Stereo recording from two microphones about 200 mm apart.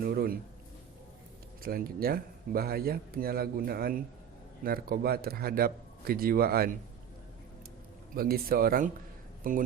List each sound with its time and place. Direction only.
0.0 s a man's voice: 50° right (ahead or behind)
1.6 s a man's voice: 50° right (ahead or behind)
8.1 s a man's voice: 50° right (ahead or behind)